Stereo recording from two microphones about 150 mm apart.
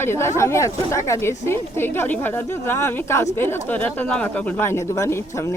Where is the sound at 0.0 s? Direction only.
15° left (ahead or behind).